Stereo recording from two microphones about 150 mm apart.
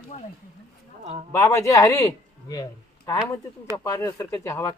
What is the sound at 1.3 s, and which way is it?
A man's voice, 15° left (ahead or behind).